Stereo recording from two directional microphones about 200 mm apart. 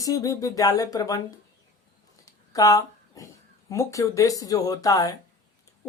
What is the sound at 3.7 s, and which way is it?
Speech, 15° left (ahead or behind).